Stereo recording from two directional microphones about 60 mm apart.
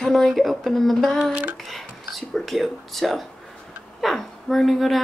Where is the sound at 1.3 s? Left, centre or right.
Right.